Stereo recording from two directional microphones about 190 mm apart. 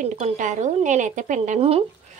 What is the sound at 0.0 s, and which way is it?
Speech, 40° right (ahead or behind).